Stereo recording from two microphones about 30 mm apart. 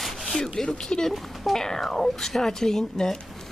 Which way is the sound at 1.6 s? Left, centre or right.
Centre.